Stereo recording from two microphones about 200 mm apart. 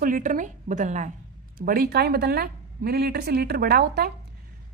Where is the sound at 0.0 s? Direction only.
40° right (ahead or behind).